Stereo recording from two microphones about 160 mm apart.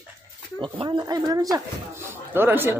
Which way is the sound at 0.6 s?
30° right (ahead or behind).